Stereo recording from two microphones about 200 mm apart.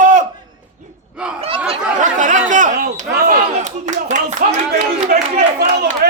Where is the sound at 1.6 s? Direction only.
35° right (ahead or behind).